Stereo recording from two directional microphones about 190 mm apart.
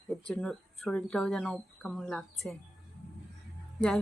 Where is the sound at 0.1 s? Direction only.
5° left (ahead or behind).